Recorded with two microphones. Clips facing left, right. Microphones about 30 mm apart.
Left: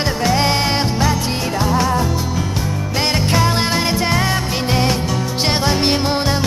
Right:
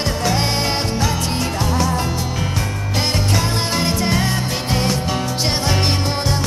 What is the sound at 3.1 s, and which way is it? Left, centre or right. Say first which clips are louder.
Music: left 6 dB; centre.